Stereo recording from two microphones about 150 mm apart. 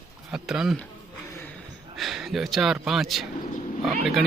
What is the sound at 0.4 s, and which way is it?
Speech, 5° right (ahead or behind).